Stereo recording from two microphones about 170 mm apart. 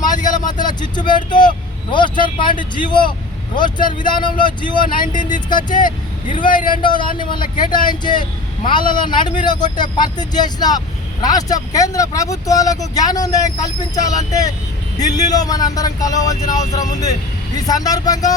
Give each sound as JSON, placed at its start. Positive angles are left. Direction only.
{"t": 0.0, "sound": "vehicle", "side_deg": 25}
{"t": 0.6, "sound": "speech", "side_deg": 25}
{"t": 6.8, "sound": "speech", "side_deg": 25}